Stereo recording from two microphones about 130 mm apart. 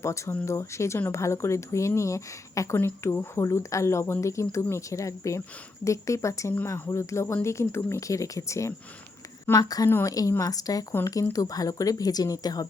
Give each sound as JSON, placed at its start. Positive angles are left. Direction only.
{"t": 0.0, "sound": "speech", "side_deg": 20}